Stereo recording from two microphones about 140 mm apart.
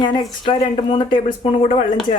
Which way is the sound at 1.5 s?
50° left (ahead or behind).